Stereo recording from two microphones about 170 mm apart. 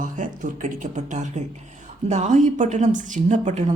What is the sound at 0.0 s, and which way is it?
A woman's voice, 50° right (ahead or behind).